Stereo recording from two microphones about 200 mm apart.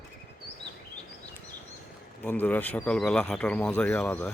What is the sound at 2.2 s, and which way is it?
Speech, 10° left (ahead or behind).